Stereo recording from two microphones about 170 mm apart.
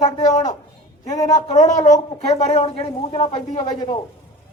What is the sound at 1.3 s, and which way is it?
A man's voice, 40° left (ahead or behind).